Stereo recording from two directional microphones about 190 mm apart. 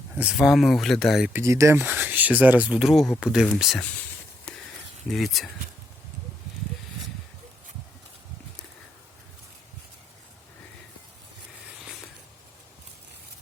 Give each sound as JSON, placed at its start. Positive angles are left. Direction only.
{"t": 0.1, "sound": "speech", "side_deg": -5}
{"t": 1.3, "sound": "speech", "side_deg": -15}
{"t": 4.5, "sound": "a sound", "side_deg": 5}
{"t": 5.0, "sound": "speech", "side_deg": 0}